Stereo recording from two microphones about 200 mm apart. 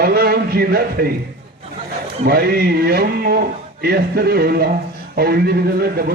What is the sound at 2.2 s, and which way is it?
A man's voice, 50° right (ahead or behind).